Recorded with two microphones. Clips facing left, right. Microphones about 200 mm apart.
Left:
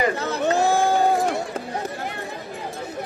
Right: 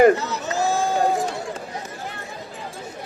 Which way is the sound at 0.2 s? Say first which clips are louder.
Left 4 dB; 55° left (ahead or behind).